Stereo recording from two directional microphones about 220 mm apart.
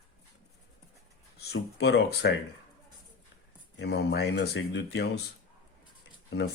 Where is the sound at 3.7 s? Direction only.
50° left (ahead or behind).